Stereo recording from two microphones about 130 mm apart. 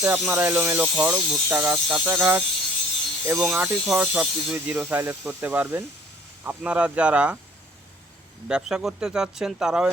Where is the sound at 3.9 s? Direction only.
15° right (ahead or behind).